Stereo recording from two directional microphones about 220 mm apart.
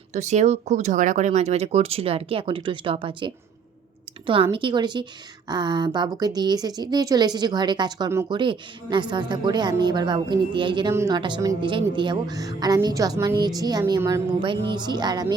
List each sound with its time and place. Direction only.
0.1 s a woman's voice: 30° right (ahead or behind)
4.5 s a woman's voice: 20° right (ahead or behind)